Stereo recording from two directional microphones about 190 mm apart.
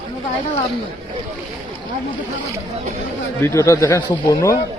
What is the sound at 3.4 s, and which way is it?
Speech, 15° left (ahead or behind).